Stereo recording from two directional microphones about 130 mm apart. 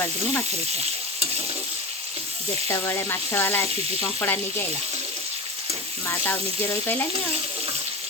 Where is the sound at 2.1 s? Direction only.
50° right (ahead or behind).